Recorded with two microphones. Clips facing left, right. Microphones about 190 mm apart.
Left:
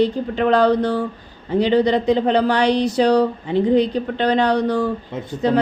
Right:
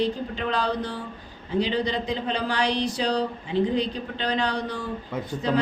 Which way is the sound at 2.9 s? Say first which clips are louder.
Left 10 dB; 65° left (ahead or behind).